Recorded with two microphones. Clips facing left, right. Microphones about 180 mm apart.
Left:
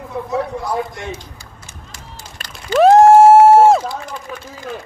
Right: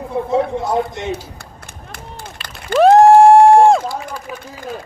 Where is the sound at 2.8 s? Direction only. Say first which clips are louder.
Even; centre (ahead or behind).